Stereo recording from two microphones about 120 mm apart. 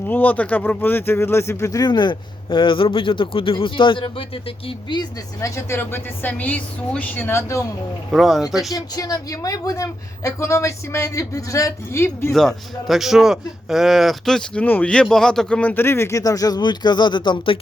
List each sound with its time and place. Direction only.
0.1 s speech: 15° left (ahead or behind); by 4.9 s 50° left (ahead or behind)
4.9 s a woman's voice: 25° left (ahead or behind)
8.1 s speech: centre (ahead or behind)
8.7 s a woman's voice: 30° left (ahead or behind)
12.3 s speech: centre (ahead or behind); by 17.6 s 45° left (ahead or behind)